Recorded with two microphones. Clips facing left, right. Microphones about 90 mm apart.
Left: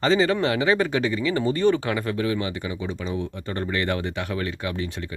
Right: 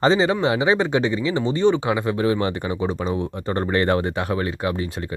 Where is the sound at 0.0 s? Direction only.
30° right (ahead or behind).